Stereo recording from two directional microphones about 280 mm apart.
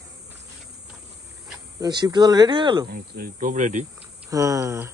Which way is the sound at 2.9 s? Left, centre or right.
Right.